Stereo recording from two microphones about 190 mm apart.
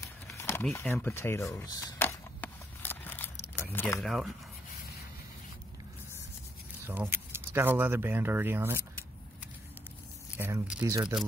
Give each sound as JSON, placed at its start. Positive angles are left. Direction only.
{"t": 0.4, "sound": "a sound", "side_deg": 15}
{"t": 3.7, "sound": "speech", "side_deg": 10}
{"t": 4.0, "sound": "speech", "side_deg": 0}
{"t": 6.9, "sound": "speech", "side_deg": -10}
{"t": 10.3, "sound": "speech", "side_deg": -10}